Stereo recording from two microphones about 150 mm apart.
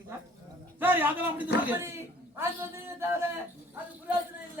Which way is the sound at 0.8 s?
10° right (ahead or behind).